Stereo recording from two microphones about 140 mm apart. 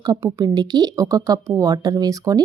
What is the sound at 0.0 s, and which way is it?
Speech, 25° right (ahead or behind).